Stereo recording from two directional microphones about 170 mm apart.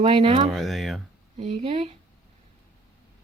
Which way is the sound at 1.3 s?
40° right (ahead or behind).